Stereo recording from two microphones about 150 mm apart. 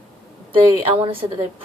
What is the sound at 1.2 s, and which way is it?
Speech, 30° right (ahead or behind).